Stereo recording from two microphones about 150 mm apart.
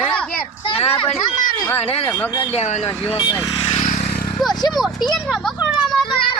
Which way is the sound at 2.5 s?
45° left (ahead or behind).